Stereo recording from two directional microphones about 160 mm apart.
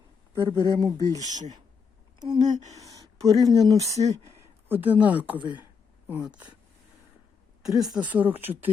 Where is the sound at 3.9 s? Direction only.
45° right (ahead or behind).